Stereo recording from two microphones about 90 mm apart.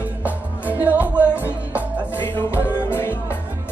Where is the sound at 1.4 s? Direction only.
25° left (ahead or behind).